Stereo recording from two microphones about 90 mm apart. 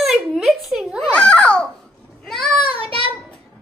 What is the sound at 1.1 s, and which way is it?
Speech, 15° left (ahead or behind).